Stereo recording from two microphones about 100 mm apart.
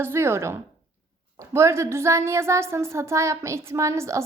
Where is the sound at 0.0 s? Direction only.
25° right (ahead or behind).